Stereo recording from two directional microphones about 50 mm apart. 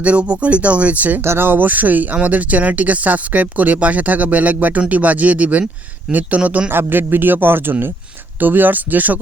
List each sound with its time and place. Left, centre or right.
0.0 s speech: right
1.2 s speech: right
6.7 s speech: right